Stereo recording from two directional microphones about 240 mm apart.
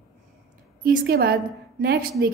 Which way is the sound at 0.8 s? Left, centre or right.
Right.